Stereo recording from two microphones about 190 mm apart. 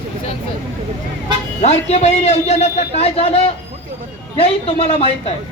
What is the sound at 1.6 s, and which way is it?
A woman's voice, 35° left (ahead or behind).